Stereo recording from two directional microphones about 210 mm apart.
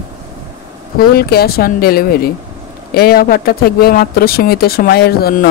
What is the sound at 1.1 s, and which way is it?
Speech, 45° left (ahead or behind).